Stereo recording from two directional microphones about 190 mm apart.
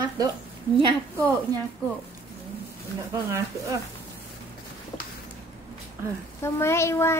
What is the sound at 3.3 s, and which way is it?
Speech, 15° right (ahead or behind).